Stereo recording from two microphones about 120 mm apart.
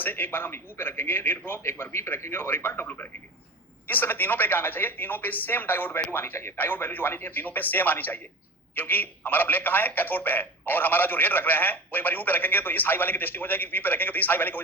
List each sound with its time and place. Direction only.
0.0 s a man's voice: 15° left (ahead or behind)